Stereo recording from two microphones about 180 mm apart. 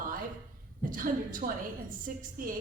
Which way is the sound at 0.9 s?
50° right (ahead or behind).